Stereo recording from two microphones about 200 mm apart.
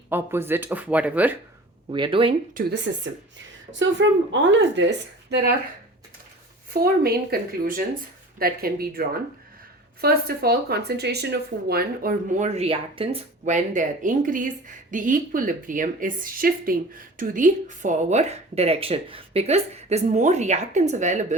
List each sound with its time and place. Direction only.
0.1 s speech: 10° right (ahead or behind)
1.9 s speech: 25° right (ahead or behind)
2.6 s speech: 55° right (ahead or behind)
4.3 s speech: 65° right (ahead or behind)
6.7 s speech: 50° right (ahead or behind)
12.5 s a woman's voice: 30° right (ahead or behind)